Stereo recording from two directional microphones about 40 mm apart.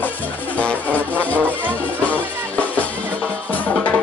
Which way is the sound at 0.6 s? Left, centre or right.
Left.